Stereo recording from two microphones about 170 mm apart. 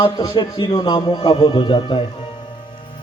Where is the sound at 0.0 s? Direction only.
30° left (ahead or behind).